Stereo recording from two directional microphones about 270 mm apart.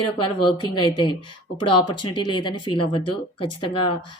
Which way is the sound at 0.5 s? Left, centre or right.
Centre.